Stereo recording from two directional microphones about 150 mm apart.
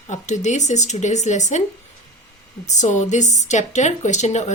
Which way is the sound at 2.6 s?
55° left (ahead or behind).